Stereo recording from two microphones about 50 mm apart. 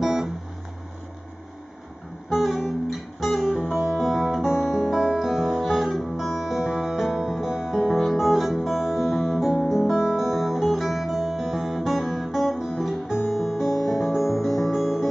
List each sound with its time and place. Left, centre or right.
0.0 s music: centre
2.2 s music: centre